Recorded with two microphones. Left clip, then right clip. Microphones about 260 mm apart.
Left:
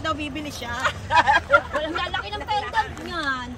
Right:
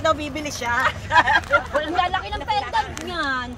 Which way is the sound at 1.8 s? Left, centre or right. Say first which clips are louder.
Right 4 dB; centre.